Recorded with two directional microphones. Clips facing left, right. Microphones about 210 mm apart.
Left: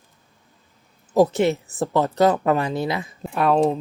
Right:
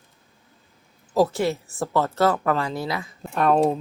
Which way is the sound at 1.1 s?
20° left (ahead or behind).